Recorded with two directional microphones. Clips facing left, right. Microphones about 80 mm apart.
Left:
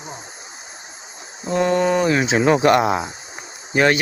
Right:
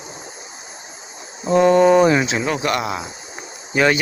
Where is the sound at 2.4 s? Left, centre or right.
Left.